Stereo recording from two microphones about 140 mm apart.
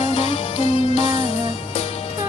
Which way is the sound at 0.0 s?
40° left (ahead or behind).